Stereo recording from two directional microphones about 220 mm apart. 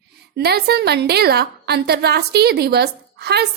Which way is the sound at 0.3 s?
45° right (ahead or behind).